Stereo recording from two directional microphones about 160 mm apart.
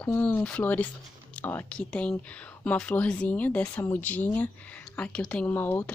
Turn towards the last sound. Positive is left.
turn(degrees=10)  # may be behind; listen again after turning